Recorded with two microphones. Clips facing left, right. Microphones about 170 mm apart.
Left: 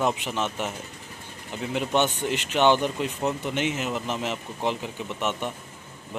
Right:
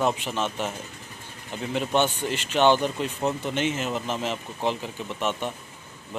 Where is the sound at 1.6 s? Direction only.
10° left (ahead or behind).